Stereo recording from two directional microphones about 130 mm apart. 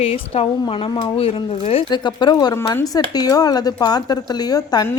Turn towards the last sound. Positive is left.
turn(degrees=30)  # may be behind; listen again after turning